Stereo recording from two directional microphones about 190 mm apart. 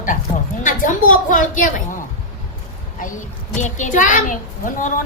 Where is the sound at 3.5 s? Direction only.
40° left (ahead or behind).